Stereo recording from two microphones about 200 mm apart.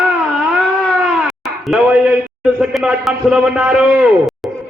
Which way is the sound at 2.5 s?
Centre (ahead or behind).